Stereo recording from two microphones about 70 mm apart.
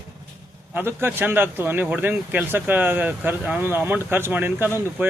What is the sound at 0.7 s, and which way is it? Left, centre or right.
Speech, right.